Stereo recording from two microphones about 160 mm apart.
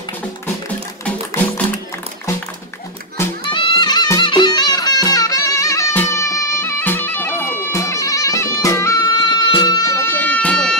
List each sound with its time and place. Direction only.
1.0 s music: 15° left (ahead or behind)
3.4 s music: 30° left (ahead or behind); by 10.8 s 5° left (ahead or behind)